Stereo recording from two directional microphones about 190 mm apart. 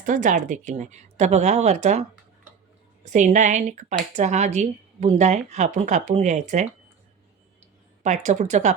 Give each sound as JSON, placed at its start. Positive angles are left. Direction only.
{"t": 0.0, "sound": "speech", "side_deg": -40}
{"t": 8.0, "sound": "speech", "side_deg": -40}